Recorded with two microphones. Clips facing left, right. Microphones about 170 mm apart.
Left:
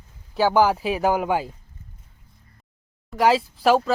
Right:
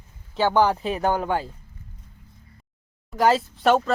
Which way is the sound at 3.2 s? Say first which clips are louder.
Left 1 dB; centre (ahead or behind).